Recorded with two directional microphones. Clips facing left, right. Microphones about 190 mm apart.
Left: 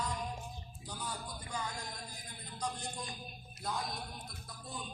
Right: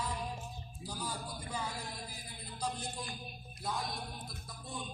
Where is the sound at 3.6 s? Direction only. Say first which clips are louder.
Right 1 dB; centre (ahead or behind).